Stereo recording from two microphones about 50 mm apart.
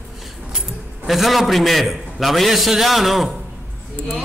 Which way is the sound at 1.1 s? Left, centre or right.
Centre.